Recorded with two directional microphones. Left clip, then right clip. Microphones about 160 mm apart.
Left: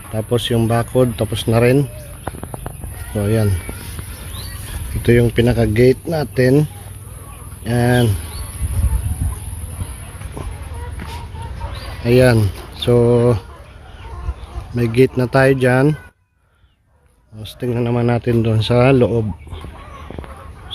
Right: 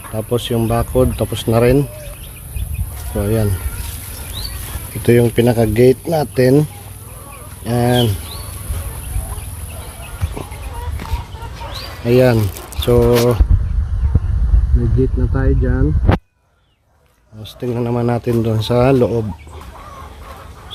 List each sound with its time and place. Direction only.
0.1 s speech: centre (ahead or behind)
3.2 s speech: 10° right (ahead or behind)
5.0 s speech: 20° right (ahead or behind)
12.0 s speech: 5° right (ahead or behind)
15.0 s speech: 5° left (ahead or behind)
17.4 s speech: 5° right (ahead or behind)